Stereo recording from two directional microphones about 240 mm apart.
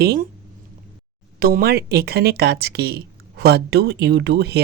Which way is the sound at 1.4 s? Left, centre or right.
Right.